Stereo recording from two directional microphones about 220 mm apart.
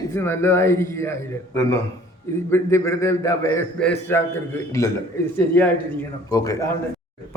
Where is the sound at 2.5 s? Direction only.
10° left (ahead or behind).